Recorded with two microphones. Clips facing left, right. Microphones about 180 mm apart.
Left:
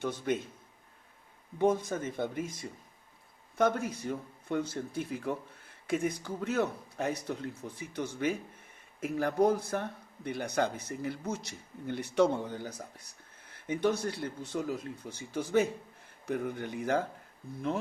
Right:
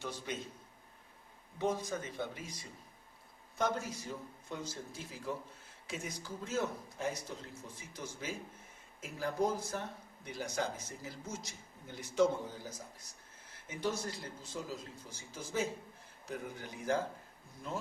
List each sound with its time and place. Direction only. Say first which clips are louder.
0.3 s speech: left 11 dB; 50° left (ahead or behind)
1.5 s speech: left 7 dB; 55° left (ahead or behind)